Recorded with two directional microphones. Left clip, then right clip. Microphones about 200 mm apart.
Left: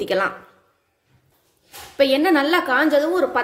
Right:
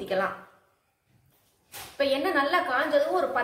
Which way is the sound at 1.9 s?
55° left (ahead or behind).